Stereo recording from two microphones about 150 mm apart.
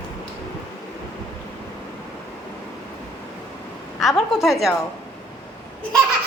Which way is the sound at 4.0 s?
Centre (ahead or behind).